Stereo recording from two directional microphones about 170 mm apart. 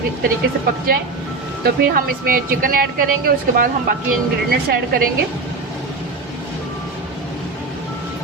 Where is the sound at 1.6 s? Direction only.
55° right (ahead or behind).